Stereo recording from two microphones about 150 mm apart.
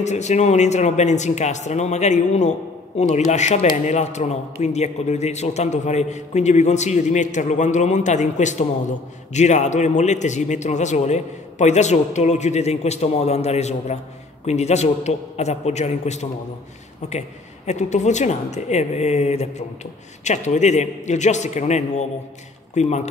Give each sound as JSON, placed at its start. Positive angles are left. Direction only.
{"t": 0.0, "sound": "a man's voice", "side_deg": 50}